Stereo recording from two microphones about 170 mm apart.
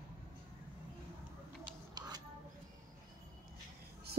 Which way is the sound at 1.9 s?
25° right (ahead or behind).